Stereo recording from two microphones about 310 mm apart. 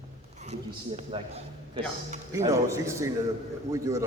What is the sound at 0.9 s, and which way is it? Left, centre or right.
A man's voice, centre.